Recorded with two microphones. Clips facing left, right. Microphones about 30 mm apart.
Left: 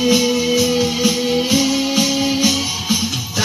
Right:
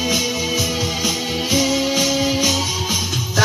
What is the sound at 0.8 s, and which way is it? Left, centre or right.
Music, centre.